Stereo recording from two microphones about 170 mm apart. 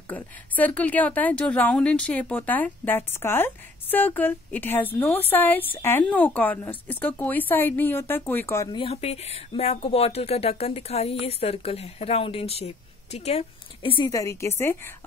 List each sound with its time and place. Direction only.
0.1 s a woman's voice: 10° left (ahead or behind)
8.7 s a woman's voice: 35° left (ahead or behind); by 14.8 s 15° left (ahead or behind)